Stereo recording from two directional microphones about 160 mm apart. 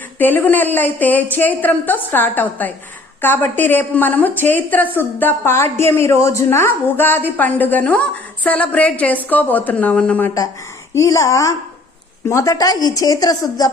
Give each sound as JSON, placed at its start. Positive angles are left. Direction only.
{"t": 0.2, "sound": "a woman's voice", "side_deg": 10}